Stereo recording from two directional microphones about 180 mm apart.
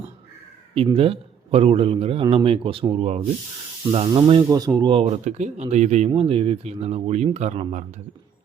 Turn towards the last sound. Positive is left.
turn(degrees=-45)  # may be behind; listen again after turning